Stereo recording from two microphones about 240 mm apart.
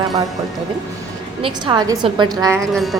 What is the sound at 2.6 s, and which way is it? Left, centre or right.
Speech, centre.